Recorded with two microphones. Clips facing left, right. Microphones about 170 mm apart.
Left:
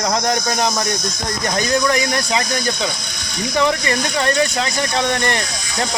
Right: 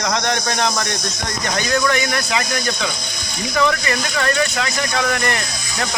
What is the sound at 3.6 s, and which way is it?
Speech, 25° left (ahead or behind).